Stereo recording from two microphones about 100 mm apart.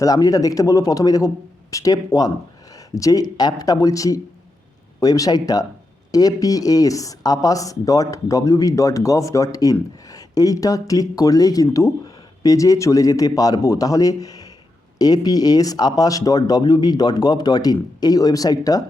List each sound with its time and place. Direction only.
0.0 s speech: 35° left (ahead or behind)